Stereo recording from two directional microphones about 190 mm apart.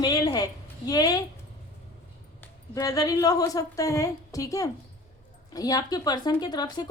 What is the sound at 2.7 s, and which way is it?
A woman's voice, 15° left (ahead or behind).